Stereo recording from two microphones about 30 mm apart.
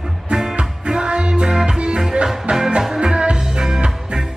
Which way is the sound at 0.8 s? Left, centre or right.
Right.